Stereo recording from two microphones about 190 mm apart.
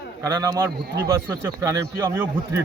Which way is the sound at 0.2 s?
20° right (ahead or behind).